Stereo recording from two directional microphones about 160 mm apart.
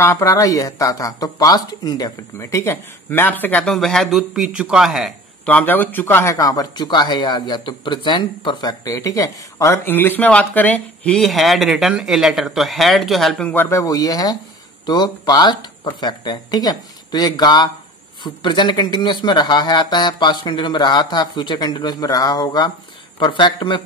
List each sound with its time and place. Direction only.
0.0 s a man's voice: 20° left (ahead or behind)